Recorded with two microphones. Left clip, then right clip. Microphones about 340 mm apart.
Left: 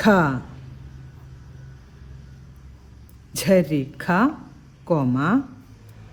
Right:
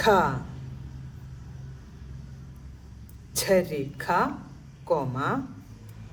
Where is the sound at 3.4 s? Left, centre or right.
Left.